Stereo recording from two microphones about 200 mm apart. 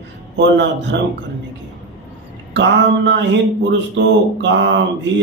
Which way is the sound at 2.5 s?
65° right (ahead or behind).